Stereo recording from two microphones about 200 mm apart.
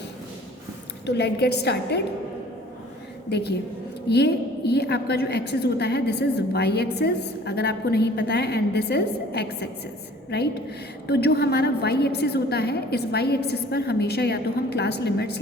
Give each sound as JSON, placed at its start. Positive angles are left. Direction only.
{"t": 1.0, "sound": "a woman's voice", "side_deg": 55}
{"t": 3.2, "sound": "a woman's voice", "side_deg": 55}